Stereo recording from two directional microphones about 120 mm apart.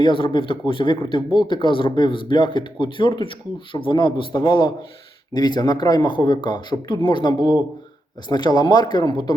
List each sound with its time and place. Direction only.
0.0 s speech: 45° left (ahead or behind)